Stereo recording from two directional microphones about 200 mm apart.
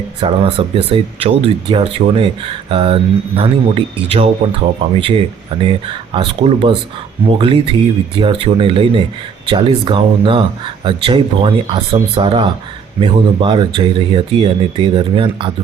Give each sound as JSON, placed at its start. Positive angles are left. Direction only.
{"t": 0.2, "sound": "speech", "side_deg": -30}